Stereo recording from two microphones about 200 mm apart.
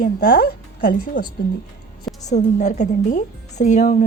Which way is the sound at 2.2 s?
35° left (ahead or behind).